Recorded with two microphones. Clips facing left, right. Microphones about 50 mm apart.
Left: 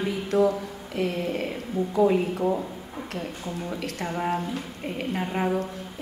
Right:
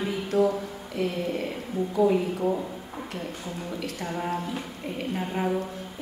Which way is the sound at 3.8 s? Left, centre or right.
Left.